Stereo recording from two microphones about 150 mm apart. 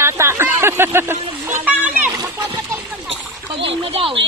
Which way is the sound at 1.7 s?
10° right (ahead or behind).